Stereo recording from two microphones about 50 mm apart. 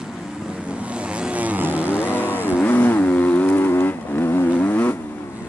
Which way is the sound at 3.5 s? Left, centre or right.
Left.